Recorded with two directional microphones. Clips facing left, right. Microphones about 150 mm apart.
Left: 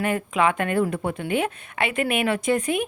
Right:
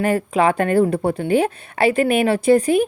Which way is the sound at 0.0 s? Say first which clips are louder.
Right 5 dB; 35° right (ahead or behind).